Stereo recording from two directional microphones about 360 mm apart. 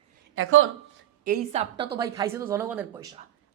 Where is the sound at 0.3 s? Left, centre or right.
Right.